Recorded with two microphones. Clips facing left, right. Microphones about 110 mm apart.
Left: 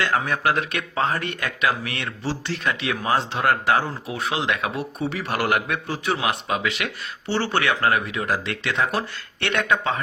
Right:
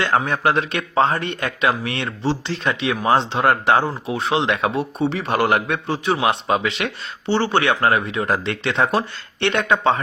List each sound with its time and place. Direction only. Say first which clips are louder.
0.0 s a man's voice: right 3 dB; 30° right (ahead or behind)